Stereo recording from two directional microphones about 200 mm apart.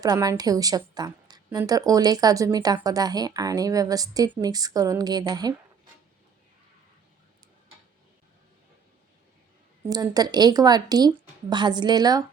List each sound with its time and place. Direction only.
0.0 s a woman's voice: 20° right (ahead or behind)
9.9 s a woman's voice: 20° right (ahead or behind)